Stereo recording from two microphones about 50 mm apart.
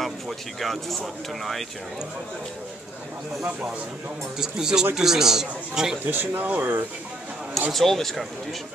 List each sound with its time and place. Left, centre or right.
0.6 s speech: centre
4.4 s a man's voice: centre
6.0 s speech: right
7.7 s speech: centre